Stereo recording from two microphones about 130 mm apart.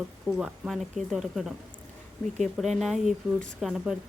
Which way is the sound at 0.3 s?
5° right (ahead or behind).